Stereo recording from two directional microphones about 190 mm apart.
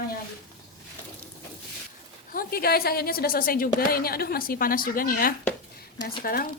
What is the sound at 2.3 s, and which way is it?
Speech, 55° left (ahead or behind).